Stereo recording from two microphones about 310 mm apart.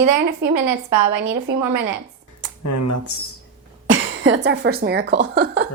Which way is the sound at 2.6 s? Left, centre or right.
Left.